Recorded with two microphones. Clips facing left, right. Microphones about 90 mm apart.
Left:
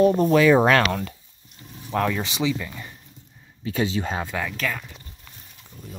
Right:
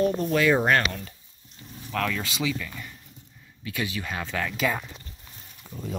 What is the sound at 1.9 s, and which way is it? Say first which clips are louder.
Speech: left 4 dB; 20° left (ahead or behind).